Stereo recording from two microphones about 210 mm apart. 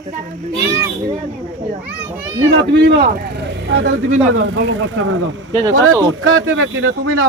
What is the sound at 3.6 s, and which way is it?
Speech, 60° right (ahead or behind).